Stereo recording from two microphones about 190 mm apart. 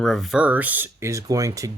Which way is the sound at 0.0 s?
Centre (ahead or behind).